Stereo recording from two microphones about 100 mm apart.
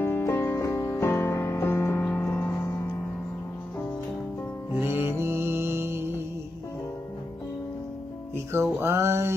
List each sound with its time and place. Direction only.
0.0 s music: 25° left (ahead or behind)
4.7 s music: 20° right (ahead or behind)
8.7 s a sound: 25° right (ahead or behind)